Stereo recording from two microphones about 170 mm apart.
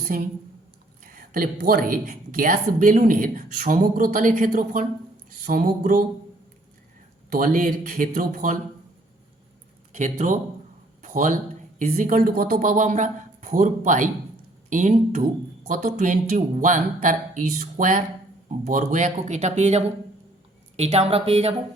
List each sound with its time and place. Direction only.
0.0 s a woman's voice: 55° right (ahead or behind)
5.3 s a sound: 55° right (ahead or behind)
7.3 s a woman's voice: 55° right (ahead or behind)
9.9 s a woman's voice: 45° right (ahead or behind)
11.0 s a sound: 50° right (ahead or behind)
11.8 s a woman's voice: 50° right (ahead or behind)